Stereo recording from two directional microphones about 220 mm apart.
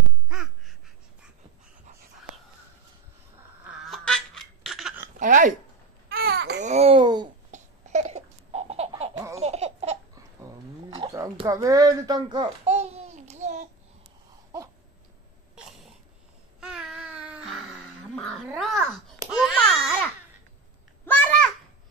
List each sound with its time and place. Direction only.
0.3 s caw: 5° right (ahead or behind)
3.8 s honk: centre (ahead or behind)
5.2 s speech: 35° right (ahead or behind)
6.0 s babbling: 45° right (ahead or behind)
6.6 s babbling: 30° right (ahead or behind)
7.5 s a sound: 30° right (ahead or behind)
9.4 s laughter: 30° right (ahead or behind)
10.9 s a sound: 20° right (ahead or behind)
12.6 s babbling: 30° right (ahead or behind)
16.5 s babbling: 5° right (ahead or behind)
19.3 s a sound: centre (ahead or behind)